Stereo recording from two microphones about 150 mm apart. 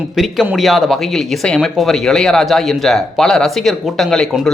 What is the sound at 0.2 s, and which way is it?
Speech, 5° right (ahead or behind).